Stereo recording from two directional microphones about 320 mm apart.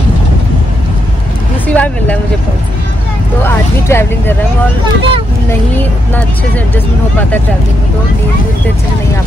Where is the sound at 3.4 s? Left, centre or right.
Centre.